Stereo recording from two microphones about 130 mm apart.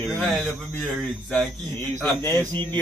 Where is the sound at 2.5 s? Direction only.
35° right (ahead or behind).